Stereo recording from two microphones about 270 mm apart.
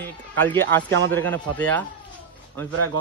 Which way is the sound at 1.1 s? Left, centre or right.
Centre.